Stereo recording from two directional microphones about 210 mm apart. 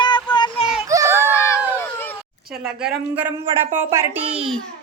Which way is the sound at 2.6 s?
5° right (ahead or behind).